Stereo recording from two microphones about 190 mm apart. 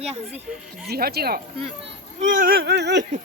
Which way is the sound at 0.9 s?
55° right (ahead or behind).